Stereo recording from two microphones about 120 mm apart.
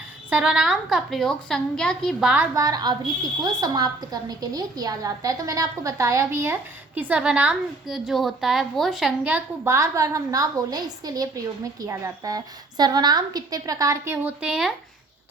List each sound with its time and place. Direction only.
0.3 s a woman's voice: 10° right (ahead or behind); by 2.1 s 5° left (ahead or behind)
2.6 s a woman's voice: 30° right (ahead or behind); by 9.1 s centre (ahead or behind)
9.2 s a woman's voice: 15° right (ahead or behind)
9.7 s a woman's voice: 25° right (ahead or behind)
14.4 s a woman's voice: 5° right (ahead or behind)